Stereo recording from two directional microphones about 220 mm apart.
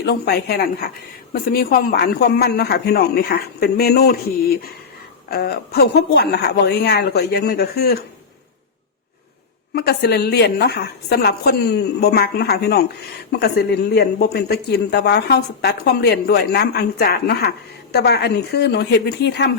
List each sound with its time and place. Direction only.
0.0 s a woman's voice: 45° left (ahead or behind)
9.7 s a woman's voice: 45° left (ahead or behind)